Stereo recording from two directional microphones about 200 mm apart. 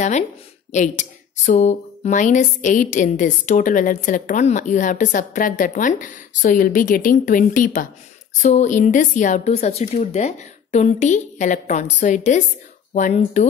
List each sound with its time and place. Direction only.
0.7 s speech: 35° left (ahead or behind)